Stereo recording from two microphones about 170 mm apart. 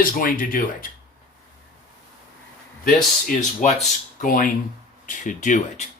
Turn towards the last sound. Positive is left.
turn(degrees=45)  # may be behind; listen again after turning